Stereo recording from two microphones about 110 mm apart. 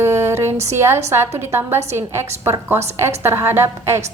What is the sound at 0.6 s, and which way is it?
A woman's voice, 25° right (ahead or behind).